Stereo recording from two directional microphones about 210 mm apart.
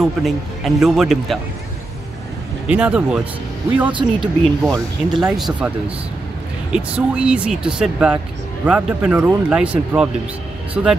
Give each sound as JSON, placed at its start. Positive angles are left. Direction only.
{"t": 0.0, "sound": "speech", "side_deg": 0}
{"t": 2.7, "sound": "speech", "side_deg": -5}
{"t": 3.9, "sound": "speech", "side_deg": -20}
{"t": 5.1, "sound": "speech", "side_deg": 0}
{"t": 6.7, "sound": "speech", "side_deg": -5}